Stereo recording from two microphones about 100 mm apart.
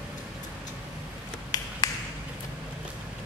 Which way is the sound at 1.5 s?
40° left (ahead or behind).